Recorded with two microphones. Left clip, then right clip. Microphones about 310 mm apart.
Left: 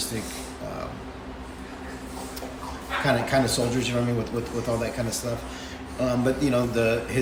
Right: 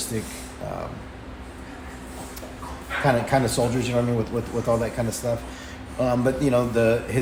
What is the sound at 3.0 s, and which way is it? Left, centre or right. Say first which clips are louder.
Speech: right 2 dB; centre.